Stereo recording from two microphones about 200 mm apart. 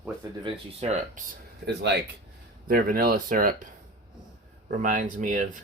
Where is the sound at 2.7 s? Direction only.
50° right (ahead or behind).